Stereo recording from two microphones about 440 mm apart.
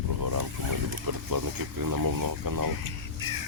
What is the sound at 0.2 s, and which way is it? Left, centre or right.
Vehicle, right.